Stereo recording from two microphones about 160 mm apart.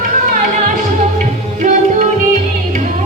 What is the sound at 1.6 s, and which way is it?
Music, 50° right (ahead or behind).